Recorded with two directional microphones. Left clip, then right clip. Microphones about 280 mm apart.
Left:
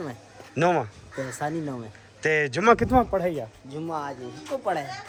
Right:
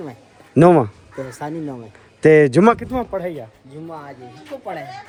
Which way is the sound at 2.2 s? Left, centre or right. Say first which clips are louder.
Right 12 dB; centre.